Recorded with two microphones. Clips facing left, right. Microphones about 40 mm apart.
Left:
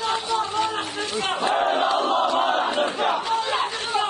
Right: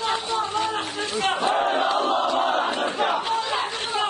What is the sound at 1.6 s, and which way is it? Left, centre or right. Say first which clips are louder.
Battle cry: left 1 dB; centre.